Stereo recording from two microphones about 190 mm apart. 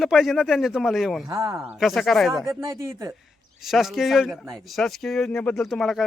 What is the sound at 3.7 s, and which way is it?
Speech, centre (ahead or behind).